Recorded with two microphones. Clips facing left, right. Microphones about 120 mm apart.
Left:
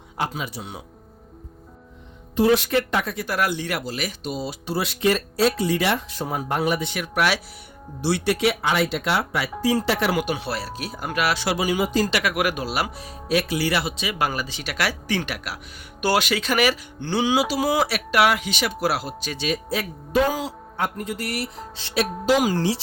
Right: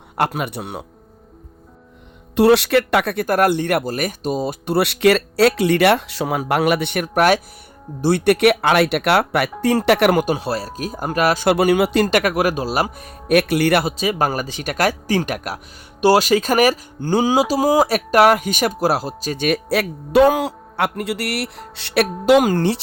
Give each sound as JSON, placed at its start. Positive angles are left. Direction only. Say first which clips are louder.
{"t": 0.2, "sound": "speech", "louder": "right 7 dB", "side_deg": -65}
{"t": 2.3, "sound": "speech", "louder": "right 5 dB", "side_deg": -75}
{"t": 7.0, "sound": "speech", "louder": "right 9 dB", "side_deg": -45}
{"t": 10.2, "sound": "speech", "louder": "right 6 dB", "side_deg": -40}
{"t": 12.3, "sound": "speech", "louder": "right 5 dB", "side_deg": -35}
{"t": 13.0, "sound": "speech", "louder": "right 7 dB", "side_deg": -55}
{"t": 16.0, "sound": "speech", "louder": "right 8 dB", "side_deg": -35}
{"t": 19.5, "sound": "speech", "louder": "right 7 dB", "side_deg": -70}